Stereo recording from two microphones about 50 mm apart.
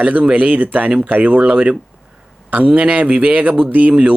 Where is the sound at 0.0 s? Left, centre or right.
Right.